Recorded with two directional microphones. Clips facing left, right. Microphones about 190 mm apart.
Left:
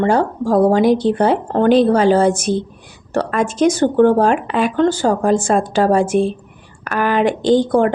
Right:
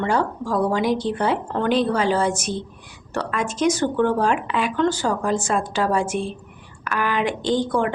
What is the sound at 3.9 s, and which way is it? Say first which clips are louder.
A woman's voice: left 7 dB; 40° left (ahead or behind).